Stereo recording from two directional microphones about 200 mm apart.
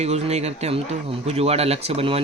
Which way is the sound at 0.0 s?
35° right (ahead or behind).